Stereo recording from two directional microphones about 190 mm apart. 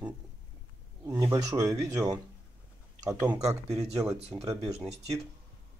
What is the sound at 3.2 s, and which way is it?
Mantra, 10° right (ahead or behind).